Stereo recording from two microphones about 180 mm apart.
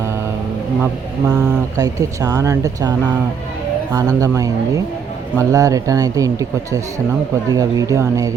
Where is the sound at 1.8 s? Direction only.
20° right (ahead or behind).